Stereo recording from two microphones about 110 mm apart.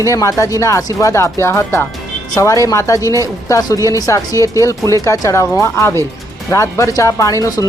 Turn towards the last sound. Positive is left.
turn(degrees=30)  # may be behind; listen again after turning